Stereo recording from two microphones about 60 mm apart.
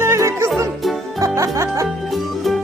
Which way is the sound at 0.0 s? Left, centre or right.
Right.